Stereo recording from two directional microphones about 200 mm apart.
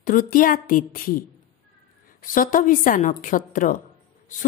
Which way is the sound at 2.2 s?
40° left (ahead or behind).